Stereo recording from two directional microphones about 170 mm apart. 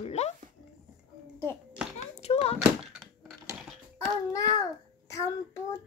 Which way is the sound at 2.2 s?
35° left (ahead or behind).